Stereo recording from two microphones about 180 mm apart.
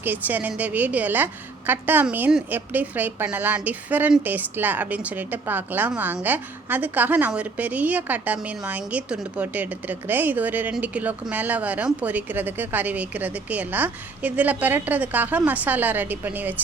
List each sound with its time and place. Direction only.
0.0 s a woman's voice: 10° right (ahead or behind)